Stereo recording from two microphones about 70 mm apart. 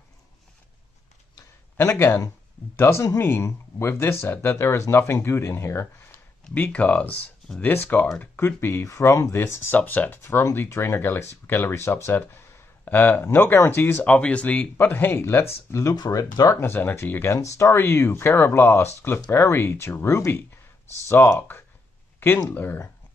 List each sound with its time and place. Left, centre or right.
1.8 s speech: left
6.5 s speech: left
8.8 s speech: left
9.8 s speech: left
14.0 s speech: centre; by 15.9 s left
15.9 s speech: left
16.5 s speech: left